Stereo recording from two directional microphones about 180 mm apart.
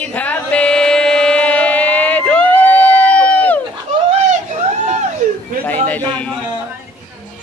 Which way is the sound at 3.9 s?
40° right (ahead or behind).